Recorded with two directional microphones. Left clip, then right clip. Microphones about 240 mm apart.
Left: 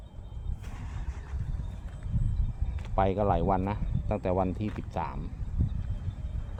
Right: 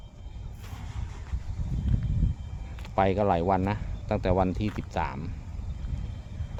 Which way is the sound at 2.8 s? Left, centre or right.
Centre.